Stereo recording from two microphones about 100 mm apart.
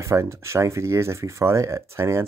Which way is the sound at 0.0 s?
30° right (ahead or behind).